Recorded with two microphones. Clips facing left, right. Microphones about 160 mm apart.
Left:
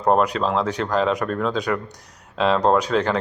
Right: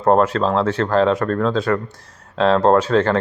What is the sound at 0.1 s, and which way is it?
Speech, 10° left (ahead or behind).